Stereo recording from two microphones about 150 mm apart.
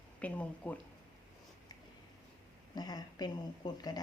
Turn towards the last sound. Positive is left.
turn(degrees=25)  # may be behind; listen again after turning